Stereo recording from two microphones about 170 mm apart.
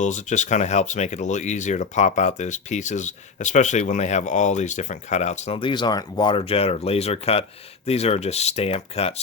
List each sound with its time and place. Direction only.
0.0 s speech: 45° left (ahead or behind)
5.5 s speech: 30° left (ahead or behind)